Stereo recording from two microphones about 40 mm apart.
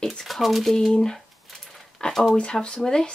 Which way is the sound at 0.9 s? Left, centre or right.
Centre.